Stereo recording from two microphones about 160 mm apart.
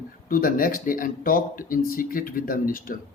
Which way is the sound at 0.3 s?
65° left (ahead or behind).